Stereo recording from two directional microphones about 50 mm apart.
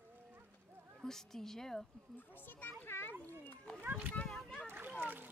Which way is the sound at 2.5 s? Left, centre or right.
Left.